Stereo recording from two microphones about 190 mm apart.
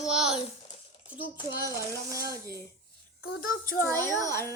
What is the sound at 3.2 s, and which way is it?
Speech, 45° left (ahead or behind).